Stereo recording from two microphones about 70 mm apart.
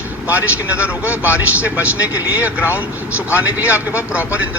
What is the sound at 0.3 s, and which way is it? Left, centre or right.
Speech, centre.